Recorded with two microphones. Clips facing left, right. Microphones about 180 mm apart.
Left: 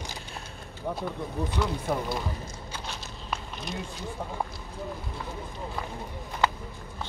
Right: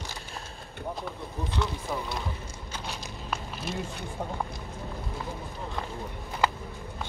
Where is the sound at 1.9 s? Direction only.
60° left (ahead or behind).